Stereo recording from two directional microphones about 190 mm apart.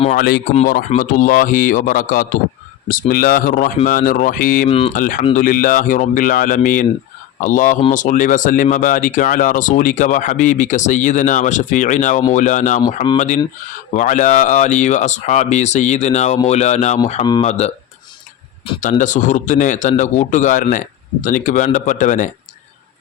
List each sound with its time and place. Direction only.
0.1 s speech: 55° left (ahead or behind)
0.9 s a man's voice: 45° left (ahead or behind)
4.7 s speech: 30° left (ahead or behind)
4.9 s a man's voice: 45° left (ahead or behind)
18.8 s speech: 40° left (ahead or behind)